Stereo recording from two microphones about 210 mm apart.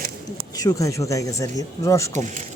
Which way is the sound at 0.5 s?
20° left (ahead or behind).